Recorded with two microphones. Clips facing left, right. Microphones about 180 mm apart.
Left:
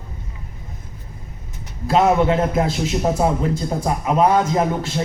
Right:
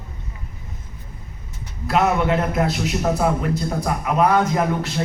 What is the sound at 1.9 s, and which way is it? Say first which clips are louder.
A man's voice: left 3 dB; 30° left (ahead or behind).